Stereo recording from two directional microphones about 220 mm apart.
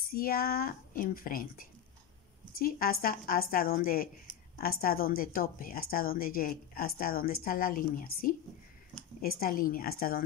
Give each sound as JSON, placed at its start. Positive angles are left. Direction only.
{"t": 0.1, "sound": "a woman's voice", "side_deg": 40}